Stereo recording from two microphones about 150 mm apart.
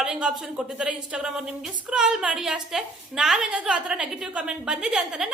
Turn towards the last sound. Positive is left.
turn(degrees=-5)  # may be behind; listen again after turning